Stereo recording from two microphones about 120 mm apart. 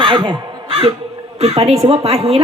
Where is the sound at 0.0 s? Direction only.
40° right (ahead or behind).